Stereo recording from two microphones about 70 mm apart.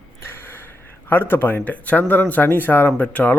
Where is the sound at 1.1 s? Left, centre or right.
Left.